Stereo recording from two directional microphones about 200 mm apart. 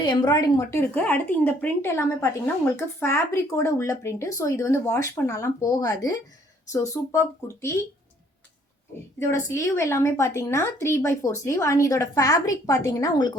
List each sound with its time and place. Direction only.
0.0 s speech: 20° left (ahead or behind)
9.5 s speech: 15° left (ahead or behind)